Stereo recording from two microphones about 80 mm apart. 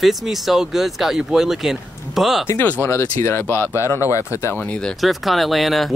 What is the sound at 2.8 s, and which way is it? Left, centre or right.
Speech, left.